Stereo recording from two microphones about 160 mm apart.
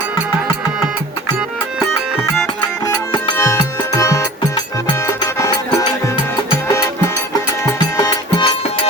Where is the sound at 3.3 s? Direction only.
20° left (ahead or behind).